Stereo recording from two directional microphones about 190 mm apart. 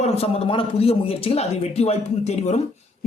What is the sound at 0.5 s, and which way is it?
Speech, 30° left (ahead or behind).